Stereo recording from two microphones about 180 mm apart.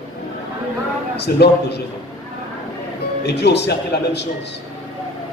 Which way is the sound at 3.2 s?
70° left (ahead or behind).